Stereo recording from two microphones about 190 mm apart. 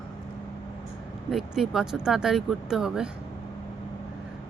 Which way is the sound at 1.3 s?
Centre (ahead or behind).